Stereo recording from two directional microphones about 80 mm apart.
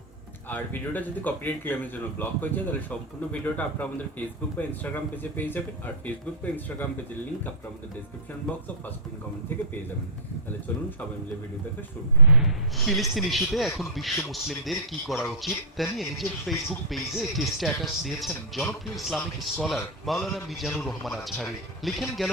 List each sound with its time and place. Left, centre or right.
0.5 s speech: left
12.3 s speech: centre